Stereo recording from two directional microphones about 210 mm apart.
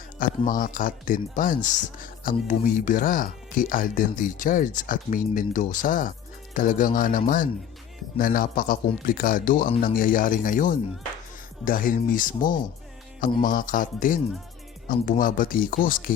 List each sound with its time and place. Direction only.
0.2 s speech: 40° left (ahead or behind)